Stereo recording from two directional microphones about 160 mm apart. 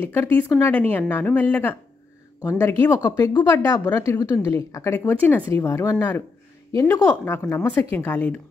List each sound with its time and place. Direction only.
0.0 s a woman's voice: 15° left (ahead or behind)